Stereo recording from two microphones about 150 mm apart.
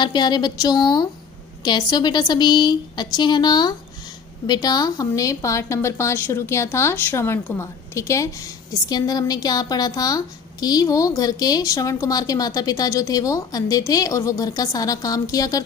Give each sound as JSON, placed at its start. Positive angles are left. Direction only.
{"t": 0.0, "sound": "a woman's voice", "side_deg": 30}